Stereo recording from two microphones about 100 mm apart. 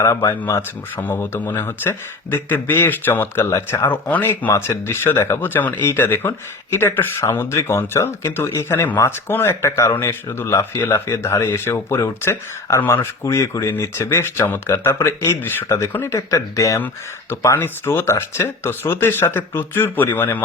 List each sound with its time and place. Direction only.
0.0 s speech: 30° left (ahead or behind)